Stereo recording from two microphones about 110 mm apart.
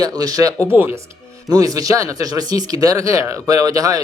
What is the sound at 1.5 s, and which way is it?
Speech, 35° right (ahead or behind).